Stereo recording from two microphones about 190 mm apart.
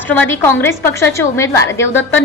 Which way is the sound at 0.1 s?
10° left (ahead or behind).